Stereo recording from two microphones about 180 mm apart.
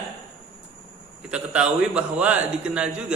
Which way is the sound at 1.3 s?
5° right (ahead or behind).